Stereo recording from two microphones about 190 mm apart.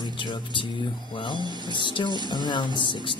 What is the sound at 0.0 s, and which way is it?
Speech, 25° left (ahead or behind).